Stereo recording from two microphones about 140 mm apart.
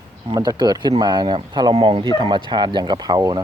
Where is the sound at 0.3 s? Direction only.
30° right (ahead or behind).